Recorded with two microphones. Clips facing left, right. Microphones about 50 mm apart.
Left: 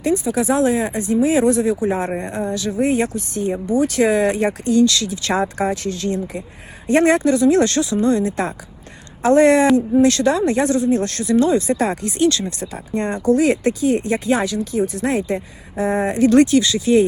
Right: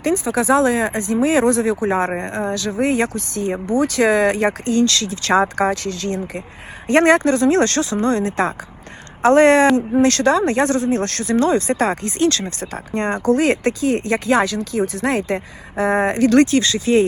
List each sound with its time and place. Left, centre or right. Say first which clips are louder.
0.0 s speech: even; right